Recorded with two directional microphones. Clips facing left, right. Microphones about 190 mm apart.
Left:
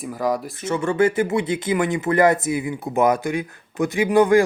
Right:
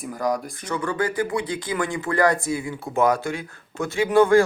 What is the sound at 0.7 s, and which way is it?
Speech, 25° left (ahead or behind).